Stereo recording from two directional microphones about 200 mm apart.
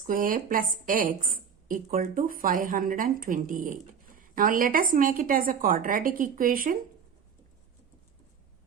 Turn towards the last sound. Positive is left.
turn(degrees=-45)  # may be behind; listen again after turning